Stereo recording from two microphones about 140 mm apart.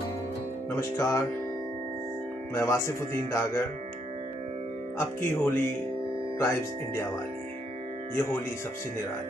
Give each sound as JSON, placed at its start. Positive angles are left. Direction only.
{"t": 0.7, "sound": "speech", "side_deg": 20}
{"t": 2.5, "sound": "speech", "side_deg": 20}
{"t": 4.9, "sound": "speech", "side_deg": 20}